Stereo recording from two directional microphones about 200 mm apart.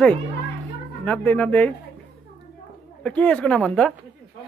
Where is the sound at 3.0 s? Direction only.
5° left (ahead or behind).